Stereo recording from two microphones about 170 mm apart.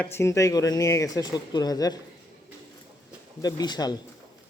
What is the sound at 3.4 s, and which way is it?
Speech, 25° left (ahead or behind).